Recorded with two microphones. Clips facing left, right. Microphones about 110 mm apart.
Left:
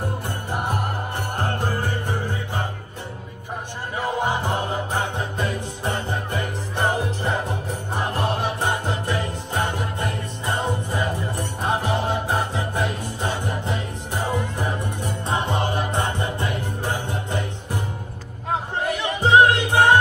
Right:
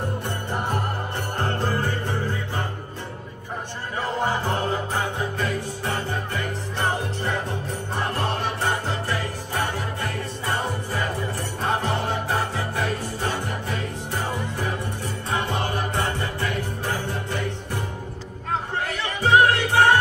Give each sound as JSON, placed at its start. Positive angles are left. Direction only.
{"t": 0.5, "sound": "music", "side_deg": 15}
{"t": 4.0, "sound": "music", "side_deg": 15}